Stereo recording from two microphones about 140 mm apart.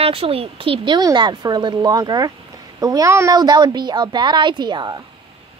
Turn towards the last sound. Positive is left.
turn(degrees=-30)  # may be behind; listen again after turning